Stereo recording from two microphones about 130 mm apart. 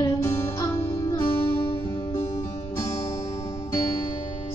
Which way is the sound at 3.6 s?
25° left (ahead or behind).